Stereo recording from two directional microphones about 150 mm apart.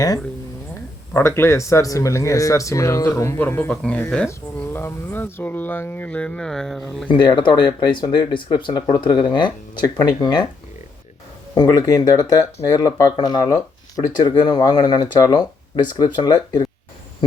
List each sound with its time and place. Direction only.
0.7 s speech: 15° left (ahead or behind)
7.1 s speech: 30° left (ahead or behind)
11.5 s speech: 25° left (ahead or behind)